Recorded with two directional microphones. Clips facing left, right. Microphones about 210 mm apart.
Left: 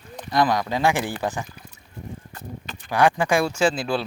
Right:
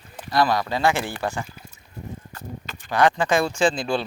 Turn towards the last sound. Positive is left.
turn(degrees=5)  # may be behind; listen again after turning